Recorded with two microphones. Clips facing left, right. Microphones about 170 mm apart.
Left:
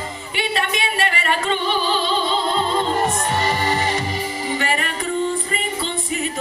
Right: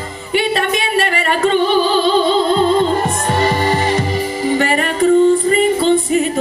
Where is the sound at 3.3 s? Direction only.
35° right (ahead or behind).